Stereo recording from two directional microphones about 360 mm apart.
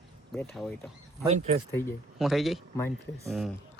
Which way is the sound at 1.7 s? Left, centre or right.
Centre.